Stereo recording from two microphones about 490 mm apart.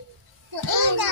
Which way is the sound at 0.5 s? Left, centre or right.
Right.